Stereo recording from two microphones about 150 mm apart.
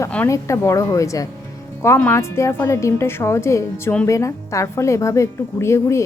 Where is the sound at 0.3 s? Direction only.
20° left (ahead or behind).